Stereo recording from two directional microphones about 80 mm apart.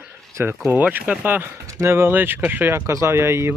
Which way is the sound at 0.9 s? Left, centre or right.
Centre.